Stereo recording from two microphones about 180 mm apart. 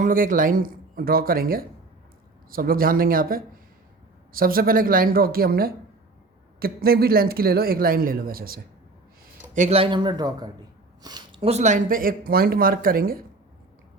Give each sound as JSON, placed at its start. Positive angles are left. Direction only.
{"t": 0.0, "sound": "speech", "side_deg": -50}
{"t": 9.6, "sound": "speech", "side_deg": -35}
{"t": 11.0, "sound": "a sound", "side_deg": -25}
{"t": 11.4, "sound": "speech", "side_deg": -40}